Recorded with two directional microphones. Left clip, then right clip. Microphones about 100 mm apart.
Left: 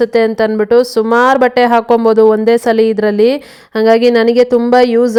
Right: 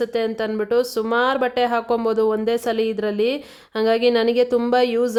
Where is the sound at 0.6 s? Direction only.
60° left (ahead or behind).